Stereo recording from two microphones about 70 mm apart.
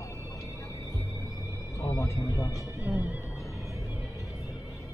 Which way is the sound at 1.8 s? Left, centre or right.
Left.